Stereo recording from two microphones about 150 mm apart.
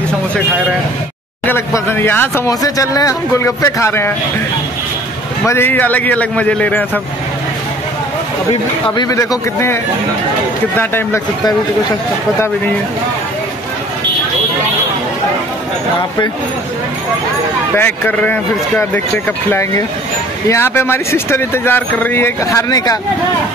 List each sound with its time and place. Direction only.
1.4 s speech: 15° left (ahead or behind)
5.5 s speech: 15° left (ahead or behind)
8.9 s a man's voice: 25° left (ahead or behind)
10.8 s speech: 15° left (ahead or behind)
17.7 s speech: 10° left (ahead or behind)